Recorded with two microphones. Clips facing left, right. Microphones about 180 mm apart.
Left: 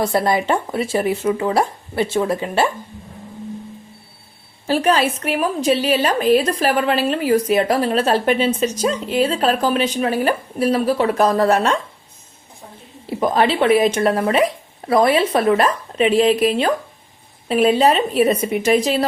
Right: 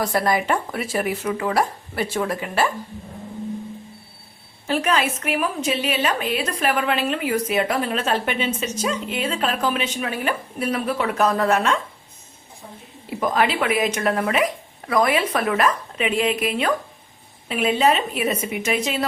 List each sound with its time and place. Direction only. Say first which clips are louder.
0.0 s speech: left 3 dB; 25° left (ahead or behind)
4.6 s a woman's voice: left 5 dB; 30° left (ahead or behind)
13.1 s a woman's voice: left 4 dB; 30° left (ahead or behind)